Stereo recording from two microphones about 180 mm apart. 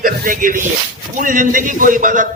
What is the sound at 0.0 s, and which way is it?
A man's voice, 50° right (ahead or behind).